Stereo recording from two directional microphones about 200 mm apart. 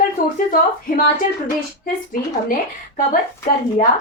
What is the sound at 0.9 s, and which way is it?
Speech, 45° left (ahead or behind).